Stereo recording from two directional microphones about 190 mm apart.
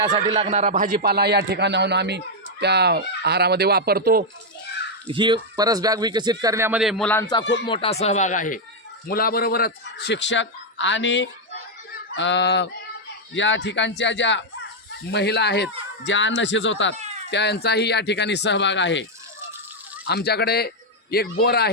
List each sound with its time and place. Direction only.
0.0 s speech: 25° right (ahead or behind)
0.5 s a man's voice: 40° right (ahead or behind)
5.0 s speech: 25° right (ahead or behind); by 7.3 s 5° left (ahead or behind)
7.7 s speech: 30° left (ahead or behind); by 15.7 s 60° left (ahead or behind)
16.0 s speech: 75° left (ahead or behind)
17.0 s cat: 35° right (ahead or behind)
17.3 s speech: 60° left (ahead or behind)
20.1 s a man's voice: 60° left (ahead or behind)